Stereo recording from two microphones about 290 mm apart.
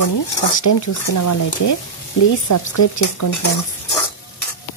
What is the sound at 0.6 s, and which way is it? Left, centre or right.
Speech, left.